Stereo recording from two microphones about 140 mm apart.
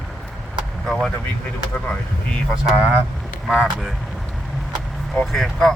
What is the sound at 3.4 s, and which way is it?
Speech, 5° right (ahead or behind).